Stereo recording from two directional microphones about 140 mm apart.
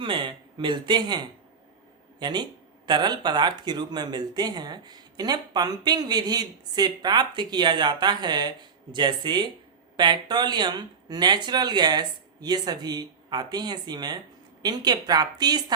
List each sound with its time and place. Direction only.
0.0 s a woman's voice: 35° right (ahead or behind)